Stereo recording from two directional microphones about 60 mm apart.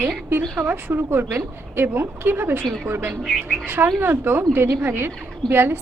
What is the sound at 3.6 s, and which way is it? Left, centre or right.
A woman's voice, right.